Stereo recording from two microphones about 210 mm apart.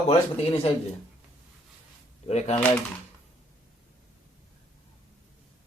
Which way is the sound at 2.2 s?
30° left (ahead or behind).